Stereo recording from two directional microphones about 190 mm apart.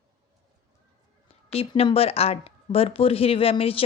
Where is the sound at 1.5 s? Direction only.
30° left (ahead or behind).